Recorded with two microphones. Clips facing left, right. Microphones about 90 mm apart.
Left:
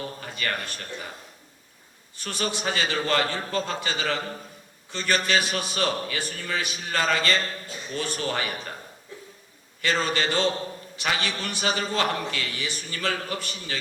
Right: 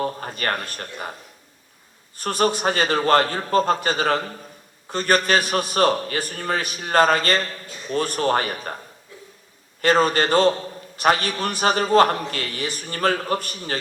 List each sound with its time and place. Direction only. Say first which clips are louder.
0.0 s a man's voice: right 7 dB; 45° right (ahead or behind)
2.1 s a man's voice: right 9 dB; 45° right (ahead or behind)
9.8 s a man's voice: right 7 dB; 45° right (ahead or behind)